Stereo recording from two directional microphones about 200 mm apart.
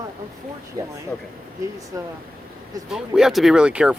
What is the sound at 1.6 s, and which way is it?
Speech, 15° right (ahead or behind).